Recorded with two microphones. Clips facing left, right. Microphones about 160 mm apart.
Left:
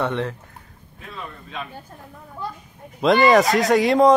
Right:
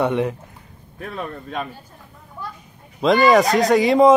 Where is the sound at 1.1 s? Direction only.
50° right (ahead or behind).